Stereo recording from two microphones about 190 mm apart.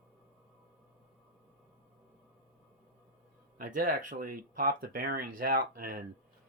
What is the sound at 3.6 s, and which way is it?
Speech, 45° right (ahead or behind).